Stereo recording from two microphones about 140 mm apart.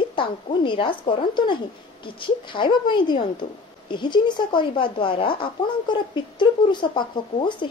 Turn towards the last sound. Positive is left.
turn(degrees=35)  # may be behind; listen again after turning